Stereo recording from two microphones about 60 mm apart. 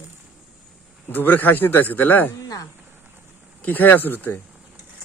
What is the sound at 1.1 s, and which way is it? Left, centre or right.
A man's voice, left.